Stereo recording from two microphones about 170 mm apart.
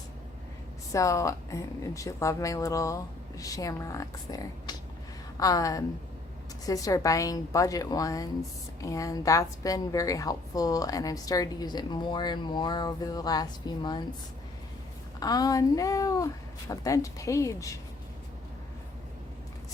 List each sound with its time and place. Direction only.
0.9 s a woman's voice: 20° left (ahead or behind)
15.2 s a woman's voice: 20° left (ahead or behind)